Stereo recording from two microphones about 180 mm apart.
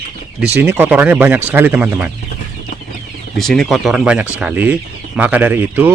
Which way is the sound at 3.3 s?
Centre (ahead or behind).